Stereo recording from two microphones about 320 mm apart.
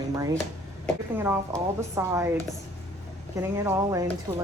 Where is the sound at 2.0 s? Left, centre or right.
Centre.